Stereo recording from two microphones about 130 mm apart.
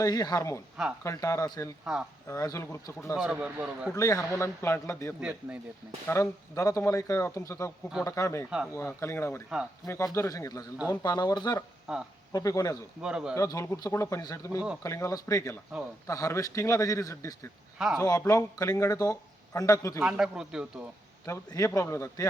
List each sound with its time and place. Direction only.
0.0 s speech: 30° left (ahead or behind)
1.8 s a man's voice: 5° right (ahead or behind)
2.2 s speech: 25° left (ahead or behind)
3.2 s a man's voice: 5° right (ahead or behind)
3.9 s speech: 25° left (ahead or behind)
8.4 s a man's voice: 5° right (ahead or behind)
8.7 s speech: 20° left (ahead or behind)
11.9 s speech: 5° right (ahead or behind)
12.3 s speech: 25° left (ahead or behind)
13.0 s a man's voice: 5° right (ahead or behind)
13.3 s speech: 25° left (ahead or behind)
20.0 s speech: 5° right (ahead or behind)
21.2 s speech: 25° left (ahead or behind)